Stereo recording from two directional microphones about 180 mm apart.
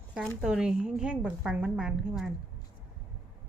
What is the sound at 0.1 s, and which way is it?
A woman's voice, 5° right (ahead or behind).